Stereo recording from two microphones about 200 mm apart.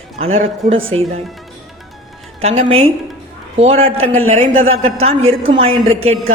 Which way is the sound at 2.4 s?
30° right (ahead or behind).